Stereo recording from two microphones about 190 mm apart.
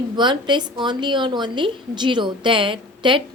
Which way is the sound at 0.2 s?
25° right (ahead or behind).